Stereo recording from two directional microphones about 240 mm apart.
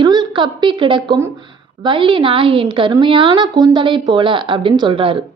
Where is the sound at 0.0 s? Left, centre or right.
Centre.